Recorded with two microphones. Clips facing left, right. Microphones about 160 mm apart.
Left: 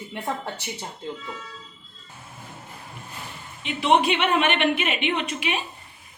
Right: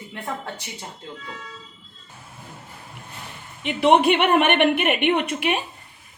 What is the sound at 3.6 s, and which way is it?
A woman's voice, 60° right (ahead or behind).